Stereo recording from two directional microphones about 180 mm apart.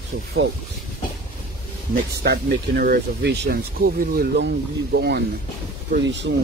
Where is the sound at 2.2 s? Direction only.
65° right (ahead or behind).